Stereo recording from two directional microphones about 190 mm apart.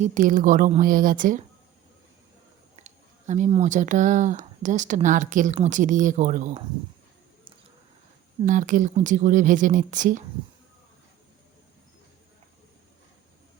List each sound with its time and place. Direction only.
0.0 s speech: 40° right (ahead or behind)
2.7 s speech: 35° right (ahead or behind)
8.4 s speech: 45° right (ahead or behind)